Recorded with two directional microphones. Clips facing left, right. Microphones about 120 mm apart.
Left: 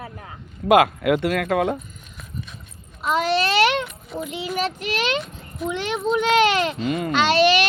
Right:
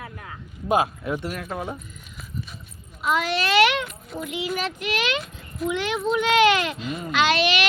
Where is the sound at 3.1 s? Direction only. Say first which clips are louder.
Left 2 dB; 35° left (ahead or behind).